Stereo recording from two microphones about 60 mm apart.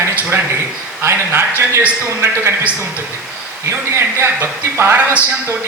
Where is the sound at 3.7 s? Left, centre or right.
Right.